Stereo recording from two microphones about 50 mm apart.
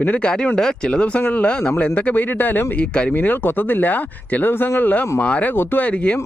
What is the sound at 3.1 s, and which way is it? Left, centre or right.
Speech, left.